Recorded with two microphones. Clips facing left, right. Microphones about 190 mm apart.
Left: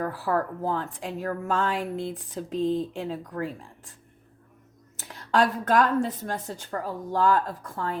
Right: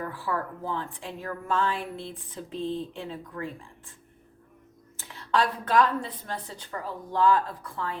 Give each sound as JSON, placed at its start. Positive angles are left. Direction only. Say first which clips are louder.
{"t": 0.0, "sound": "speech", "louder": "left 5 dB", "side_deg": 40}
{"t": 5.0, "sound": "a woman's voice", "louder": "left 3 dB", "side_deg": 45}